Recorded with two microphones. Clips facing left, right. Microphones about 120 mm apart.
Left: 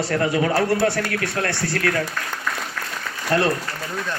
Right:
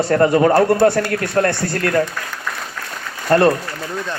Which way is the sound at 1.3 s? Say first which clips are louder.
Right 6 dB; 45° right (ahead or behind).